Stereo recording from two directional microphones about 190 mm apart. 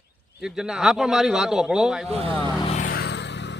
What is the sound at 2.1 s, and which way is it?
Speech, 30° right (ahead or behind).